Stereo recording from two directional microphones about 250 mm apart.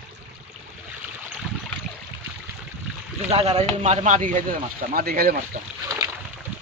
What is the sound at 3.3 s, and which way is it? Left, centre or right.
Speech, right.